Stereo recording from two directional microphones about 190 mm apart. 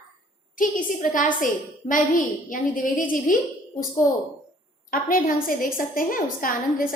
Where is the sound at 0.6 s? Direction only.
45° left (ahead or behind).